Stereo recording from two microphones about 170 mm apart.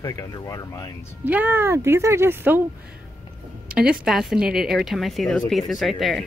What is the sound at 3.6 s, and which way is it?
Speech, 5° right (ahead or behind).